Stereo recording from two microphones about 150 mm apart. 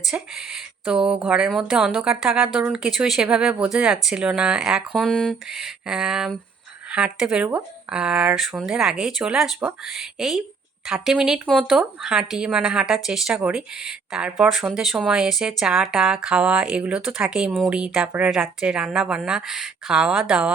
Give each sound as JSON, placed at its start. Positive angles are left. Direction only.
{"t": 0.0, "sound": "speech", "side_deg": -5}
{"t": 10.0, "sound": "speech", "side_deg": 0}